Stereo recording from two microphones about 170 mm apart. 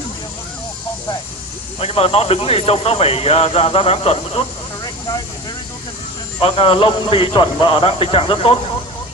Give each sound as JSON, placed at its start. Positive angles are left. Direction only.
{"t": 1.8, "sound": "speech", "side_deg": 35}
{"t": 6.4, "sound": "speech", "side_deg": 35}